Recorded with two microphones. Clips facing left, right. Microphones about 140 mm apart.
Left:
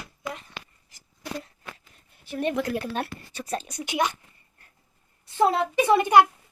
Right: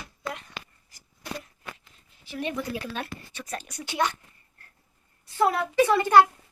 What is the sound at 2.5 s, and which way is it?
Speech, 90° left.